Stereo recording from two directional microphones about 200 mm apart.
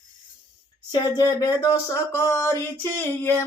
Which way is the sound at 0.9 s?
20° left (ahead or behind).